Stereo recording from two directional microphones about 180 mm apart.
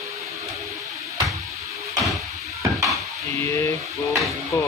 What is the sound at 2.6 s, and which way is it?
Stir, 15° right (ahead or behind).